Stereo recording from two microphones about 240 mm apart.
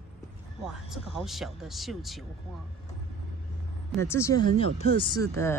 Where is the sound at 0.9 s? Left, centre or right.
Centre.